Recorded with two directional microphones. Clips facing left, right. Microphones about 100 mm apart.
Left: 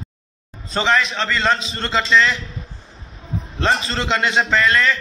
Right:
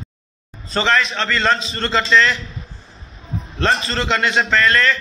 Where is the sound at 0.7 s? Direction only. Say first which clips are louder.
Even; 10° left (ahead or behind).